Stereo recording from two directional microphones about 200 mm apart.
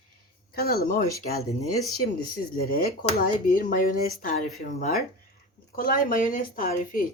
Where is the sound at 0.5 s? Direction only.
50° left (ahead or behind).